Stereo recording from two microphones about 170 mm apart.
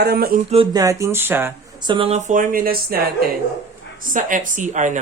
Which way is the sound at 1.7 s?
25° right (ahead or behind).